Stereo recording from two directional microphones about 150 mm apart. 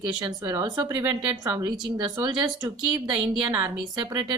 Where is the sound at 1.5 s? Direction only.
25° right (ahead or behind).